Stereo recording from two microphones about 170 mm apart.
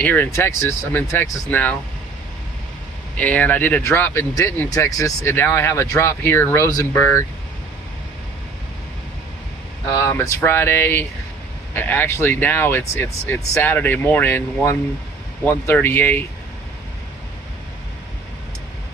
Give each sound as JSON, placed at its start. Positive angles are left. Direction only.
{"t": 0.0, "sound": "speech", "side_deg": 10}
{"t": 3.2, "sound": "speech", "side_deg": 10}
{"t": 9.9, "sound": "speech", "side_deg": 20}